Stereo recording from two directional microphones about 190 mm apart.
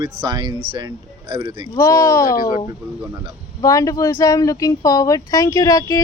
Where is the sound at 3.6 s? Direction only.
15° left (ahead or behind).